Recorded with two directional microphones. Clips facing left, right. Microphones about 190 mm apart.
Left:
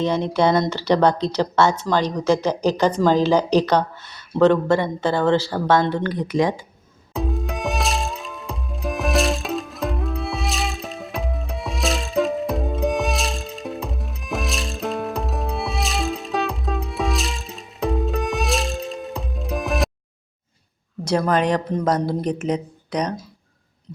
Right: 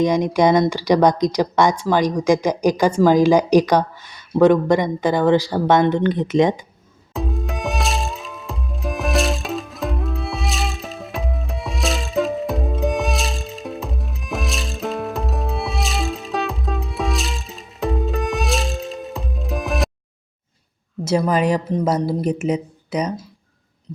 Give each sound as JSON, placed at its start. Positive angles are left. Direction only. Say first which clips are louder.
{"t": 0.0, "sound": "speech", "louder": "right 3 dB", "side_deg": -15}
{"t": 7.1, "sound": "music", "louder": "even", "side_deg": 0}
{"t": 21.0, "sound": "a woman's voice", "louder": "right 1 dB", "side_deg": -5}